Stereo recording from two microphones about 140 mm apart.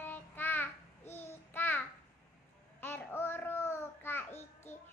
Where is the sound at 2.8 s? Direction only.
15° left (ahead or behind).